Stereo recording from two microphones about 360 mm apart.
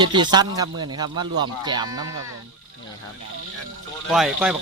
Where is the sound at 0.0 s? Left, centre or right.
Centre.